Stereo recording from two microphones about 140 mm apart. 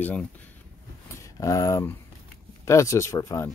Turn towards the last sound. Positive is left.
turn(degrees=20)  # may be behind; listen again after turning